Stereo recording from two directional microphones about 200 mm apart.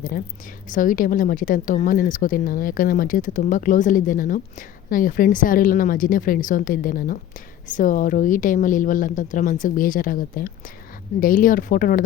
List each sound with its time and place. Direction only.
0.7 s a woman's voice: 40° left (ahead or behind)